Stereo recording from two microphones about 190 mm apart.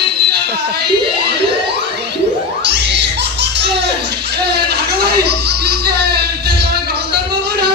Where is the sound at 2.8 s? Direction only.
65° right (ahead or behind).